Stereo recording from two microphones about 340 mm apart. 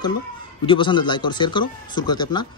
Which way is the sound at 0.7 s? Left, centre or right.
Centre.